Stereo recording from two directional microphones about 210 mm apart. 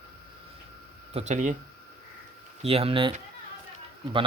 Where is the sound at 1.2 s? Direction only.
35° right (ahead or behind).